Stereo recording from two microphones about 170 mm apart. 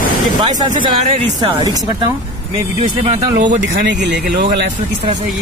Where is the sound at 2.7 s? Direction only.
35° right (ahead or behind).